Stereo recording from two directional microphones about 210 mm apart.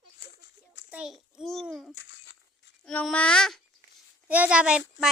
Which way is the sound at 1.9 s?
60° left (ahead or behind).